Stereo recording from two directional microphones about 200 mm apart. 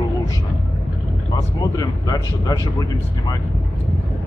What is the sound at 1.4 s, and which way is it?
Speech, 15° left (ahead or behind).